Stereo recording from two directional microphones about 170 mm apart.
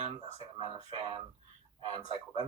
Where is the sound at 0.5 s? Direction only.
30° right (ahead or behind).